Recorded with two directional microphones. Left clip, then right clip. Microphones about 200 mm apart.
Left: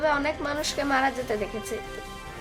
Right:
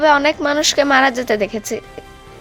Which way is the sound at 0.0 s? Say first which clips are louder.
Right 12 dB; 40° right (ahead or behind).